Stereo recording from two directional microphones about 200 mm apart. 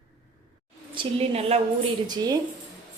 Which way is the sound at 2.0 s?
20° right (ahead or behind).